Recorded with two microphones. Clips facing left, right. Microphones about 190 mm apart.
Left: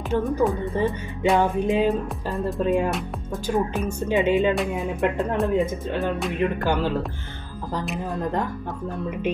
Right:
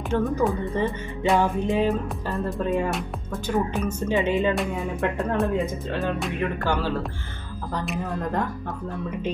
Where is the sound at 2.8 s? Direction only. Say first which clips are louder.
Left 1 dB; centre (ahead or behind).